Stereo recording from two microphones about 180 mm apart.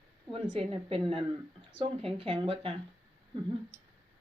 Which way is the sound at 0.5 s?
30° right (ahead or behind).